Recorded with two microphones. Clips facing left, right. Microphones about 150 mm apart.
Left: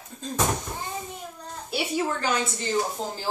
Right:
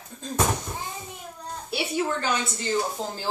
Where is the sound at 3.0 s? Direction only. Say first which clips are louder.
Even; 15° right (ahead or behind).